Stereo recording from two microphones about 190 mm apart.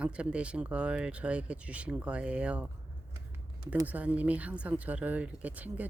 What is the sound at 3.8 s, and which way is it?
Speech, 5° right (ahead or behind).